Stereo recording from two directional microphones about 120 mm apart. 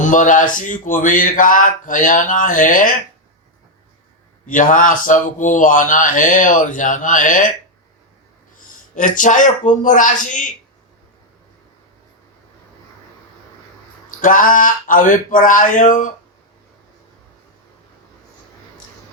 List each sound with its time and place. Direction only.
0.0 s speech: 90° left
4.4 s speech: 90° left
8.7 s speech: 90° left
14.2 s speech: 90° left